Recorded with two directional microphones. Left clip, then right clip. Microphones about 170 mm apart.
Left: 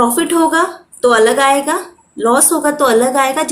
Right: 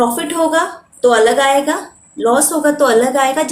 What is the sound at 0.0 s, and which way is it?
A woman's voice, 35° left (ahead or behind).